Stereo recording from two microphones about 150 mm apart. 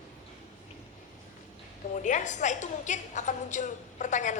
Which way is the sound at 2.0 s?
55° left (ahead or behind).